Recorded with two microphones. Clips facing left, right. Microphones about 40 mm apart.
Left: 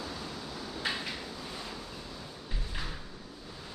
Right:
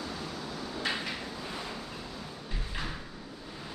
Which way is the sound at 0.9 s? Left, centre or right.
Centre.